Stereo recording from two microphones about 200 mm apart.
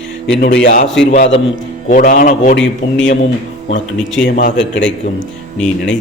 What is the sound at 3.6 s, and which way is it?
Speech, 65° left (ahead or behind).